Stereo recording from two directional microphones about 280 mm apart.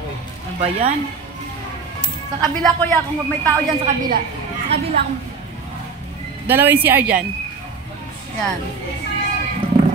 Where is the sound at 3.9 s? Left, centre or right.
Right.